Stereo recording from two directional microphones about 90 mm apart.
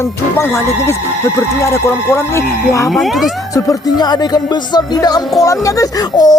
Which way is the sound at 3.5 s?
45° left (ahead or behind).